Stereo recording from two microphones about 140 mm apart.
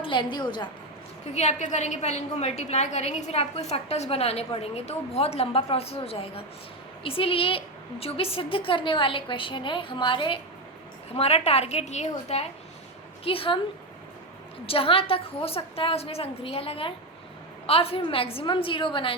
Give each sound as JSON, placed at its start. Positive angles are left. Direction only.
{"t": 0.0, "sound": "a woman's voice", "side_deg": 35}
{"t": 1.3, "sound": "a woman's voice", "side_deg": 55}
{"t": 14.7, "sound": "a woman's voice", "side_deg": 40}